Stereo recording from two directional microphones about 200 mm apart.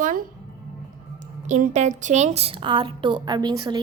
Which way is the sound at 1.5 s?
35° right (ahead or behind).